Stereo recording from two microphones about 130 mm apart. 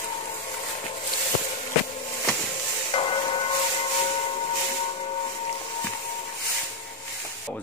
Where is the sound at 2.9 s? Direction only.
45° left (ahead or behind).